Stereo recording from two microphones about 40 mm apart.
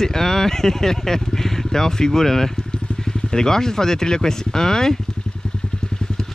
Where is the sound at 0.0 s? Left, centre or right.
Centre.